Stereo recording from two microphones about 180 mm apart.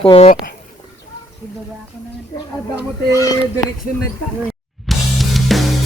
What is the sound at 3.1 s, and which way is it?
Speech, 20° left (ahead or behind).